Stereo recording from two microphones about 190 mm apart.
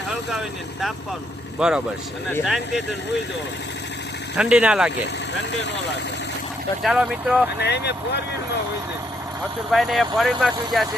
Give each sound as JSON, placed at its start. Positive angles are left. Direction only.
{"t": 0.3, "sound": "speech", "side_deg": 0}
{"t": 4.4, "sound": "speech", "side_deg": -5}
{"t": 6.8, "sound": "speech", "side_deg": 0}
{"t": 7.6, "sound": "speech", "side_deg": 60}
{"t": 9.7, "sound": "speech", "side_deg": 0}